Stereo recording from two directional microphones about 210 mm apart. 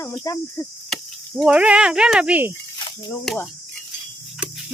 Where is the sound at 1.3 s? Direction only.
5° right (ahead or behind).